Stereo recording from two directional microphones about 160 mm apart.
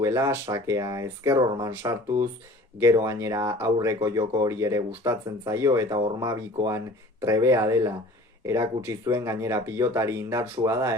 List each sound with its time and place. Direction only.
0.0 s speech: 15° right (ahead or behind)